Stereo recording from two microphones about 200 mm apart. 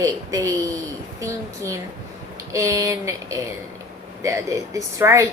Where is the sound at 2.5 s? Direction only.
15° right (ahead or behind).